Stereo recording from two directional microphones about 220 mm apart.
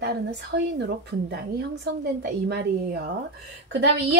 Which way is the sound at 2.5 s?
45° right (ahead or behind).